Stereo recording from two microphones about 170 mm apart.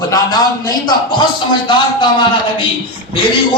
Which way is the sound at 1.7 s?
30° left (ahead or behind).